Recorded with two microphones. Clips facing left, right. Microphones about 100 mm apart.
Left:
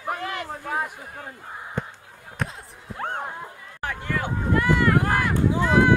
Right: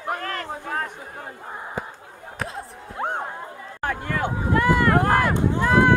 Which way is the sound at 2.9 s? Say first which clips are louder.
Right 3 dB; 20° right (ahead or behind).